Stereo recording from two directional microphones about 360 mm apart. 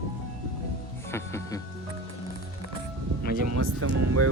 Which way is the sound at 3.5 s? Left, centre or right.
Right.